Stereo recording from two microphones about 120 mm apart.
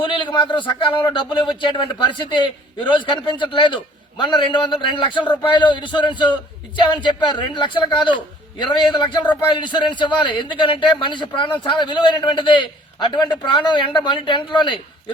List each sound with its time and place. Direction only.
0.0 s a man's voice: 40° left (ahead or behind)